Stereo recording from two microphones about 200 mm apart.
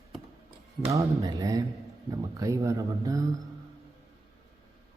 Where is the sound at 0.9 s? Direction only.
15° right (ahead or behind).